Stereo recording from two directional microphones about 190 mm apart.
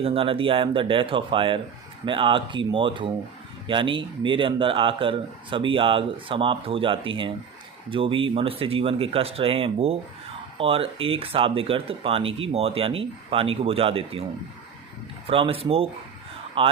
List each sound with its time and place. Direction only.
0.0 s speech: 30° right (ahead or behind)
15.3 s speech: 30° right (ahead or behind)